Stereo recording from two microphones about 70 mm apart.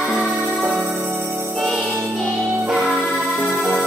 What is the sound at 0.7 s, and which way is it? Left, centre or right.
Music, right.